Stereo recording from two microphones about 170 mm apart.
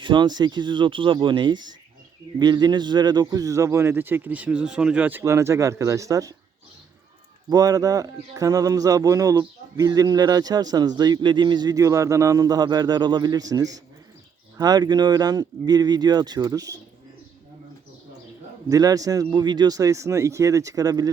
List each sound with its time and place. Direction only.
0.0 s a man's voice: 25° right (ahead or behind)
7.5 s a man's voice: 20° right (ahead or behind)
18.7 s a man's voice: 20° right (ahead or behind)